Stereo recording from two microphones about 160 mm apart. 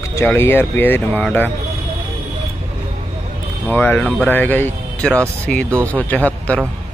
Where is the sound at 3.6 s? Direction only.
10° left (ahead or behind).